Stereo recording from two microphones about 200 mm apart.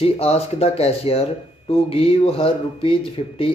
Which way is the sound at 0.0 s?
30° left (ahead or behind).